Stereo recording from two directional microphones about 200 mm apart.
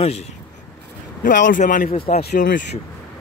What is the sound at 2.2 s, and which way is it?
Speech, 50° left (ahead or behind).